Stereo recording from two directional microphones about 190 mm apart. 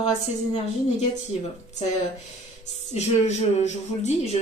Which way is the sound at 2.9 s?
35° left (ahead or behind).